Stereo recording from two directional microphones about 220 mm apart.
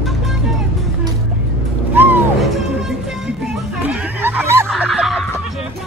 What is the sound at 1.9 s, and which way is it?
Music, 10° right (ahead or behind).